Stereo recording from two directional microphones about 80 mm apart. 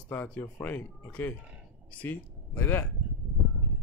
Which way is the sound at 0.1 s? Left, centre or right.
Left.